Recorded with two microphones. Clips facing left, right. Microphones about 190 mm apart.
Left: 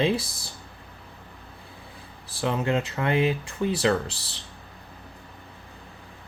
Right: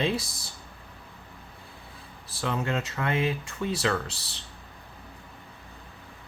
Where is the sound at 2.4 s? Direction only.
25° left (ahead or behind).